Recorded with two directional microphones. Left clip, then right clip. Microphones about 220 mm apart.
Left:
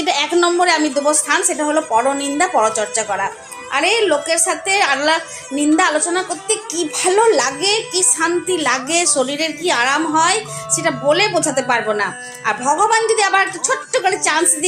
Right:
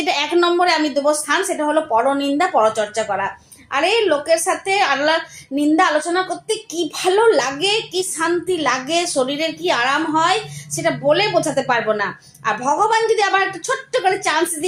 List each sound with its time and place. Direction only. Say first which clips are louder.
0.0 s a woman's voice: left 1 dB; 15° left (ahead or behind)